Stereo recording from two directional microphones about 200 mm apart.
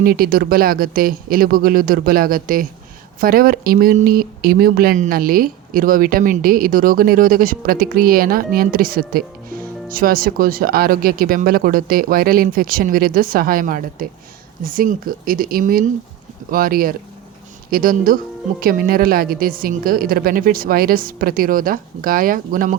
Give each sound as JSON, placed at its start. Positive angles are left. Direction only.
{"t": 0.0, "sound": "speech", "side_deg": -45}